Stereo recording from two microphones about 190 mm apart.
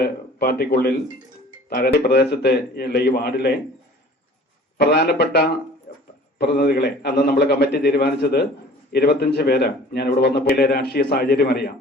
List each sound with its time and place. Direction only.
0.0 s a man's voice: 55° left (ahead or behind)
4.8 s a man's voice: 60° left (ahead or behind)
5.9 s a sound: 55° left (ahead or behind)
6.4 s a man's voice: 60° left (ahead or behind)